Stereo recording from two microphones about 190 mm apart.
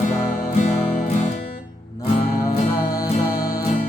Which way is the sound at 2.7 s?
15° left (ahead or behind).